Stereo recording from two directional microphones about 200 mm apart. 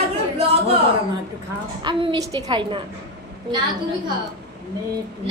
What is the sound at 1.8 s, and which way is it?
A woman's voice, 25° right (ahead or behind).